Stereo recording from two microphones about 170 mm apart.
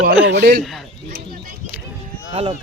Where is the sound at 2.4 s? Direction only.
35° right (ahead or behind).